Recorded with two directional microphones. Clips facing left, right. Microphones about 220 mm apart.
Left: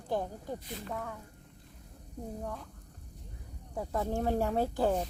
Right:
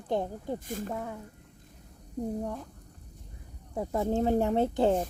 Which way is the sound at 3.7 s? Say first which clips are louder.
Right 5 dB; 25° right (ahead or behind).